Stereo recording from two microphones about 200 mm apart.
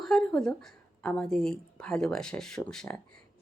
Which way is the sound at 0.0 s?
5° left (ahead or behind).